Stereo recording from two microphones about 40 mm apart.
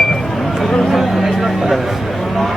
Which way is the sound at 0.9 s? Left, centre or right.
Centre.